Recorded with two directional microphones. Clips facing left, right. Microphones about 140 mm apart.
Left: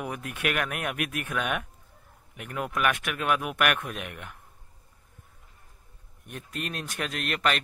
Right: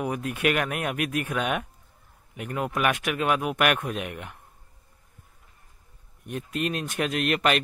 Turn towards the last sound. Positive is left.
turn(degrees=-5)  # may be behind; listen again after turning